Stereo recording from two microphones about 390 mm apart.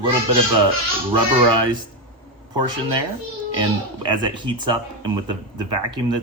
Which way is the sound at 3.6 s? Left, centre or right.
Centre.